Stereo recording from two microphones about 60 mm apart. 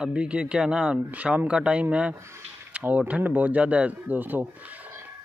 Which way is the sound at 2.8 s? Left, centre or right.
Right.